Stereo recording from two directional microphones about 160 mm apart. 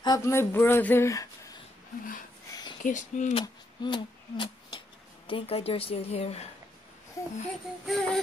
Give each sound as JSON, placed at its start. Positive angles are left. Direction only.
{"t": 0.0, "sound": "speech", "side_deg": 20}
{"t": 2.8, "sound": "speech", "side_deg": 50}
{"t": 3.3, "sound": "speech", "side_deg": 30}
{"t": 7.2, "sound": "a child's voice", "side_deg": 20}
{"t": 7.8, "sound": "music", "side_deg": 0}